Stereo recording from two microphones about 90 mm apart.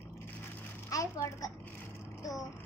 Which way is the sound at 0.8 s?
35° left (ahead or behind).